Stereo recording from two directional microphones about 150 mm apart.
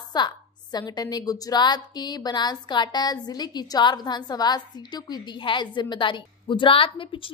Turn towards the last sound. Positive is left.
turn(degrees=35)  # may be behind; listen again after turning